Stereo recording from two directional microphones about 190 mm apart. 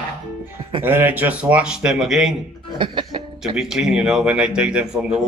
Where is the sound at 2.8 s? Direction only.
25° right (ahead or behind).